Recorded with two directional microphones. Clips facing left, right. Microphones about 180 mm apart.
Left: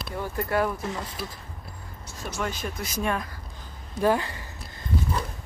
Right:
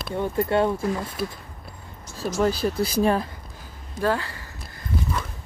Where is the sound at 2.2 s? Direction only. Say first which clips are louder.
Right 9 dB; 35° right (ahead or behind).